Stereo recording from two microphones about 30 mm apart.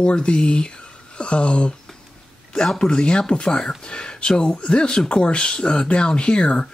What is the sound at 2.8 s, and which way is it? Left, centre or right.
Speech, left.